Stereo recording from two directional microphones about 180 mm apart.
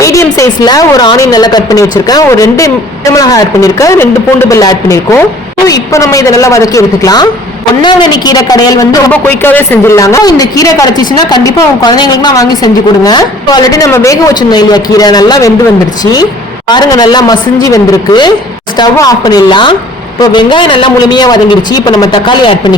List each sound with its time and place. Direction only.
0.0 s speech: 15° left (ahead or behind)
16.6 s speech: 20° left (ahead or behind)